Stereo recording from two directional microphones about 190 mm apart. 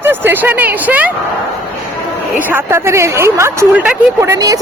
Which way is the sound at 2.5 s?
15° right (ahead or behind).